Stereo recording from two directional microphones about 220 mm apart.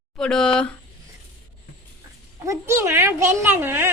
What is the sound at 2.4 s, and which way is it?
Speech, 10° right (ahead or behind).